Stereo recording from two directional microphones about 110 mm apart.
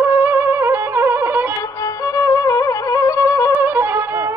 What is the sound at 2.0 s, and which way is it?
Music, 30° left (ahead or behind).